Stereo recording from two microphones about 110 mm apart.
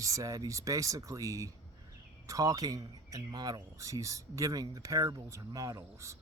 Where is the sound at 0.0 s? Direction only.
30° right (ahead or behind).